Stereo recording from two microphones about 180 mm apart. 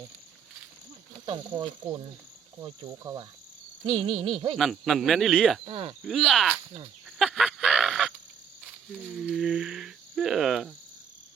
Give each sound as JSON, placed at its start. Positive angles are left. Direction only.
{"t": 1.2, "sound": "speech", "side_deg": -25}
{"t": 4.5, "sound": "speech", "side_deg": 0}
{"t": 5.6, "sound": "cricket", "side_deg": -30}
{"t": 6.1, "sound": "speech", "side_deg": 0}
{"t": 7.2, "sound": "a sound", "side_deg": 0}
{"t": 8.9, "sound": "speech", "side_deg": 0}